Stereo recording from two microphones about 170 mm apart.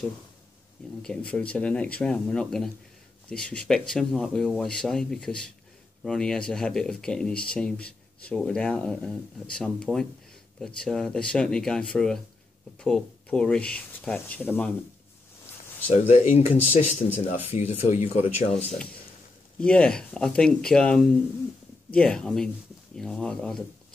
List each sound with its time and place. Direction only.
1.0 s speech: 5° left (ahead or behind)
15.9 s speech: 40° left (ahead or behind)
19.6 s speech: 5° left (ahead or behind)